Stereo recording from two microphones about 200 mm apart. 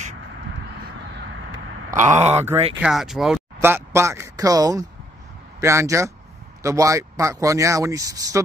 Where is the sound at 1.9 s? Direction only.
35° right (ahead or behind).